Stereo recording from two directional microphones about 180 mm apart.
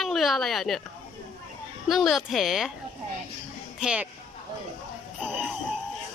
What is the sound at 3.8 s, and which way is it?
Speech, 5° right (ahead or behind).